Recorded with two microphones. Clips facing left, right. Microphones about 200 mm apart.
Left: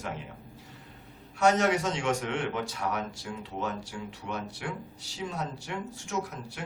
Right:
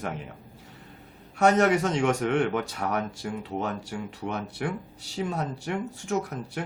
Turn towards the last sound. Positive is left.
turn(degrees=-60)  # may be behind; listen again after turning